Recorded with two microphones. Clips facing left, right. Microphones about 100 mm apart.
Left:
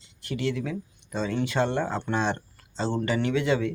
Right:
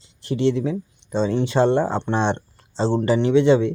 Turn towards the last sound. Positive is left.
turn(degrees=-30)  # may be behind; listen again after turning